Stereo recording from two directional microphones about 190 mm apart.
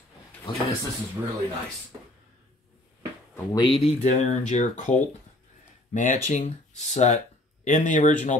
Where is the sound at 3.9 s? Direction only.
35° left (ahead or behind).